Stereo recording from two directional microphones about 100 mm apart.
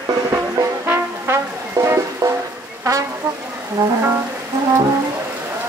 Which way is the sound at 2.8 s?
35° right (ahead or behind).